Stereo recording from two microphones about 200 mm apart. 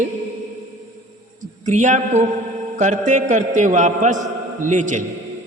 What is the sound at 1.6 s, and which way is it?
A man's voice, 35° right (ahead or behind).